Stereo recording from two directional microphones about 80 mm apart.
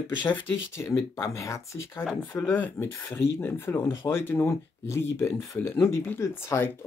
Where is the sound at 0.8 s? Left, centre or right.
Left.